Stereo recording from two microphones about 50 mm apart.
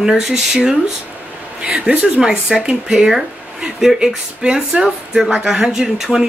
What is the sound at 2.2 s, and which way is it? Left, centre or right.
Speech, centre.